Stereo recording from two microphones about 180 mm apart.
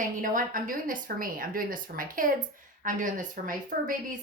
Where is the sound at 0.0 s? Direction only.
50° right (ahead or behind).